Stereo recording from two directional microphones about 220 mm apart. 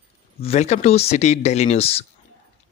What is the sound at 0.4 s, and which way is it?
Speech, 30° left (ahead or behind).